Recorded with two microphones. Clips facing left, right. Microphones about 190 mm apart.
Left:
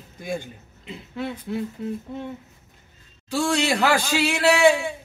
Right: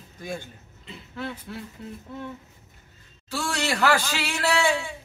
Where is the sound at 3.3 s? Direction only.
15° left (ahead or behind).